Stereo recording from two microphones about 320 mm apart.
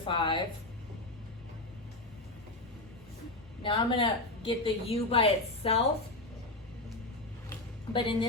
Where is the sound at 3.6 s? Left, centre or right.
Centre.